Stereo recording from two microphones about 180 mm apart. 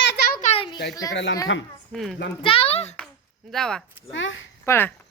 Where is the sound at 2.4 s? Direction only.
30° left (ahead or behind).